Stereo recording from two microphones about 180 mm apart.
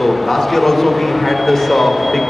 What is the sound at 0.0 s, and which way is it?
A man's voice, centre (ahead or behind).